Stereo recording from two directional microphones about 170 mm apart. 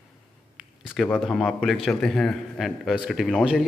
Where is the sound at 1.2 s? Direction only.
Centre (ahead or behind).